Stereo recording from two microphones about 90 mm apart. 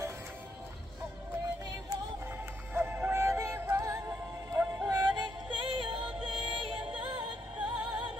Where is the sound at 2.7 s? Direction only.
25° right (ahead or behind).